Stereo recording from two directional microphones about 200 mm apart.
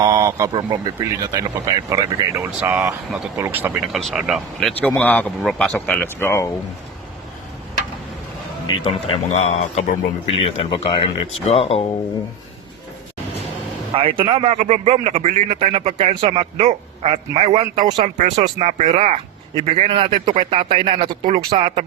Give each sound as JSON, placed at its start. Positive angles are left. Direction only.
{"t": 0.0, "sound": "speech", "side_deg": -15}
{"t": 3.8, "sound": "speech", "side_deg": 0}
{"t": 8.6, "sound": "speech", "side_deg": 25}
{"t": 13.9, "sound": "speech", "side_deg": -25}